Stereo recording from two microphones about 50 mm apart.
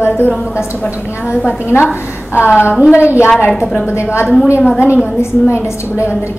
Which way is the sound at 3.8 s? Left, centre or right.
Left.